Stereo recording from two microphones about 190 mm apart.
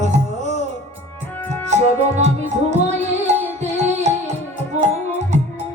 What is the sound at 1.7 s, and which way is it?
Music, 35° right (ahead or behind).